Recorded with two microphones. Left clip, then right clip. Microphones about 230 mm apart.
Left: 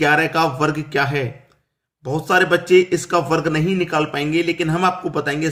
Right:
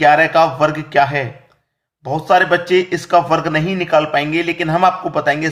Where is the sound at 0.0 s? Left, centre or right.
Centre.